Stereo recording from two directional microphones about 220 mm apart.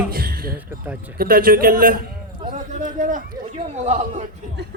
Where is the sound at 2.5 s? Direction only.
35° right (ahead or behind).